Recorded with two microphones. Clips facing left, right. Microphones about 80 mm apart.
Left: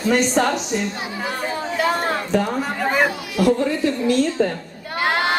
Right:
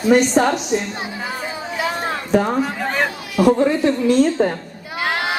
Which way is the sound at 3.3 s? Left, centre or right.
Right.